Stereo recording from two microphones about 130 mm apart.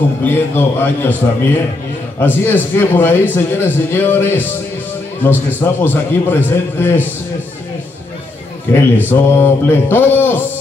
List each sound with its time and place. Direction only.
0.2 s speech: 15° left (ahead or behind)
2.1 s speech: 15° left (ahead or behind)
8.7 s speech: 15° left (ahead or behind)